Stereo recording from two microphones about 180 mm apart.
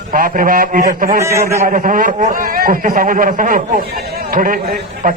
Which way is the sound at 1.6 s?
50° right (ahead or behind).